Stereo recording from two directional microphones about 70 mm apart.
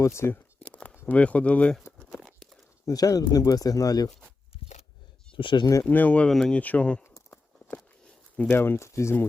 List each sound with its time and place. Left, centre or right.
0.0 s speech: left
0.6 s a sound: centre
1.0 s speech: centre
2.2 s a sound: centre
2.8 s speech: left
5.4 s speech: left
5.9 s speech: left
6.2 s speech: centre
6.6 s speech: left
7.0 s a sound: left
8.4 s speech: left